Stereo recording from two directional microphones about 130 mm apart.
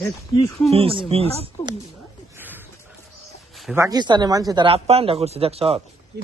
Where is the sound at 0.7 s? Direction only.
45° right (ahead or behind).